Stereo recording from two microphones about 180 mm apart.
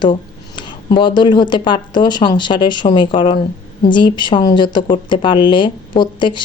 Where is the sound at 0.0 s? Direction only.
25° left (ahead or behind).